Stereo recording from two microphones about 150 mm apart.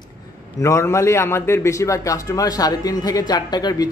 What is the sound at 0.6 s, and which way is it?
A man's voice, 20° left (ahead or behind).